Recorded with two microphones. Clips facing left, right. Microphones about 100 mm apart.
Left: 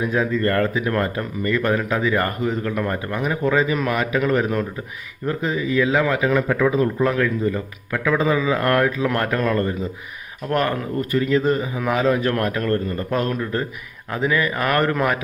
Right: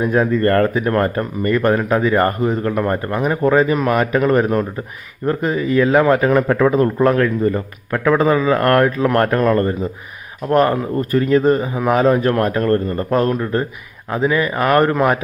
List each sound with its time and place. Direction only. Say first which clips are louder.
0.0 s a man's voice: right 5 dB; 45° right (ahead or behind)